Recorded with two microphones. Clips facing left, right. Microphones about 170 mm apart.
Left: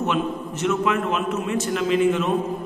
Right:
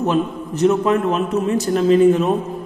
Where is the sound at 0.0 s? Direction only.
35° right (ahead or behind).